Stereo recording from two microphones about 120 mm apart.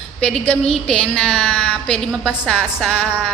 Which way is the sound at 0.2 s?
5° left (ahead or behind).